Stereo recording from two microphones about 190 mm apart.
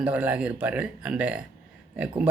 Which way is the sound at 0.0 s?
5° right (ahead or behind).